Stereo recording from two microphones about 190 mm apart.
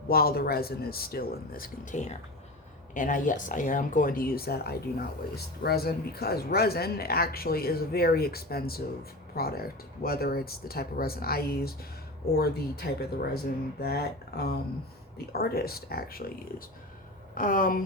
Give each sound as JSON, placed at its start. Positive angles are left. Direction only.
{"t": 0.1, "sound": "speech", "side_deg": 50}
{"t": 17.3, "sound": "speech", "side_deg": 45}